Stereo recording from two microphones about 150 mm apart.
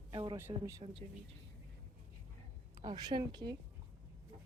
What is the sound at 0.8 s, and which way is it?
Speech, 35° right (ahead or behind).